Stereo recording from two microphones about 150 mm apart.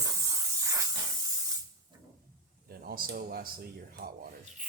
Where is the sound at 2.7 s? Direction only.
85° right.